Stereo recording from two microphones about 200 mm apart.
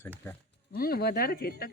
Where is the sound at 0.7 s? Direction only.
50° left (ahead or behind).